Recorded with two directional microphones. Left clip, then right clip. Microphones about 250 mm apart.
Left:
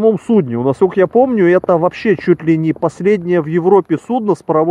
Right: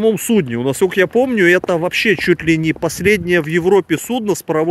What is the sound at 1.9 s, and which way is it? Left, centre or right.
Speech, left.